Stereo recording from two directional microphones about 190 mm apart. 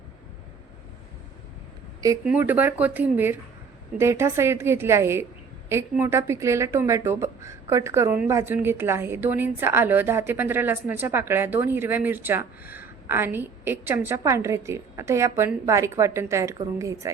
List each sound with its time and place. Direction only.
2.2 s speech: 10° right (ahead or behind)